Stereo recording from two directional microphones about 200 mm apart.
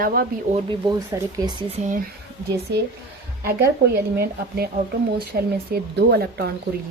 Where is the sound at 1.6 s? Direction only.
35° right (ahead or behind).